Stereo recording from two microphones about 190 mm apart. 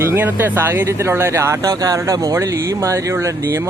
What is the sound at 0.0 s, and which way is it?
Speech, 10° right (ahead or behind).